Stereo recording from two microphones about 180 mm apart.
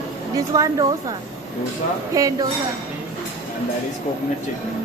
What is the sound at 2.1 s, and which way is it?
Speech, 20° right (ahead or behind).